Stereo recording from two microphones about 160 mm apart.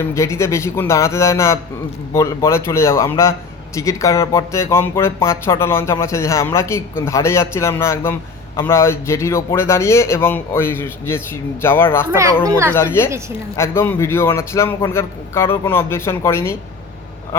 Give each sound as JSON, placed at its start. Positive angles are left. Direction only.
{"t": 0.0, "sound": "speech", "side_deg": 15}
{"t": 12.5, "sound": "a child's voice", "side_deg": -20}
{"t": 12.7, "sound": "speech", "side_deg": 15}